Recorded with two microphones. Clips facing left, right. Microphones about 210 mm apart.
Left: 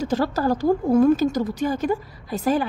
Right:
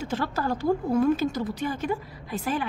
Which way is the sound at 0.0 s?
40° left (ahead or behind).